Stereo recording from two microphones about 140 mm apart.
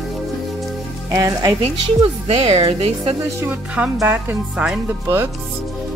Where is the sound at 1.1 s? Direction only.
25° right (ahead or behind).